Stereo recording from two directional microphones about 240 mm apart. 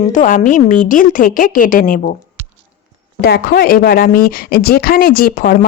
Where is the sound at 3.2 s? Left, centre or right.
Left.